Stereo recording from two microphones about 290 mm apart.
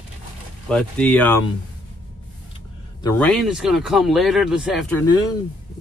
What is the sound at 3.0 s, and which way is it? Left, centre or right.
Speech, centre.